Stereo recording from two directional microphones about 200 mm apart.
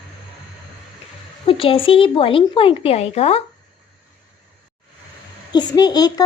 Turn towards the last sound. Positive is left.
turn(degrees=20)  # may be behind; listen again after turning